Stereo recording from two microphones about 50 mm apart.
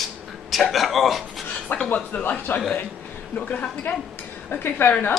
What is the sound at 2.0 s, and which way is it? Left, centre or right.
Speech, left.